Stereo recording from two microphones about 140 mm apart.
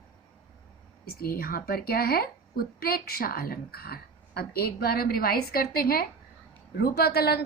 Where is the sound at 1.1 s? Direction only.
90° left.